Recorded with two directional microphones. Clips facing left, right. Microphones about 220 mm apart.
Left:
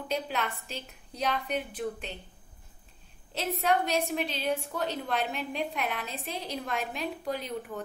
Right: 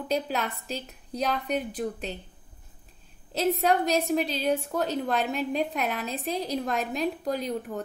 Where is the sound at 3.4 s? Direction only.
40° right (ahead or behind).